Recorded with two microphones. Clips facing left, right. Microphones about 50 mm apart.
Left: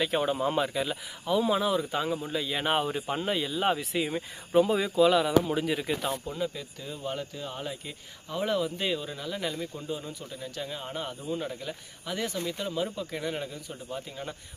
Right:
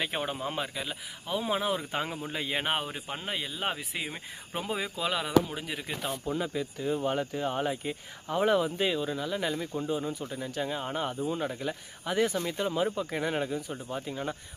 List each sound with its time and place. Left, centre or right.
0.0 s speech: centre
0.3 s speech: centre
1.3 s speech: right
2.6 s speech: centre
5.5 s speech: centre
6.2 s speech: centre
8.8 s speech: centre
9.7 s speech: right